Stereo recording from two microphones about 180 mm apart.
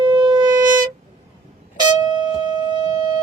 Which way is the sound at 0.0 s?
25° right (ahead or behind).